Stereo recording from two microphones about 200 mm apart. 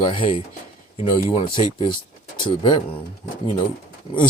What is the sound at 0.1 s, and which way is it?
Speech, 25° left (ahead or behind).